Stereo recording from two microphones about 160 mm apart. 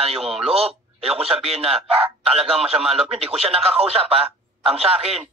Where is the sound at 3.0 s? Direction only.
40° right (ahead or behind).